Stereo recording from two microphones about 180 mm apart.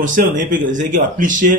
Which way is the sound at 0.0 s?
45° right (ahead or behind).